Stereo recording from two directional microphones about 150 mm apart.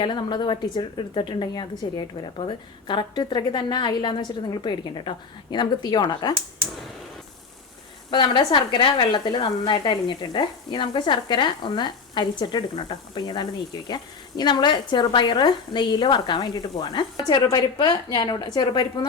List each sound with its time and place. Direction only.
0.0 s speech: 30° left (ahead or behind)
8.1 s a woman's voice: 30° left (ahead or behind)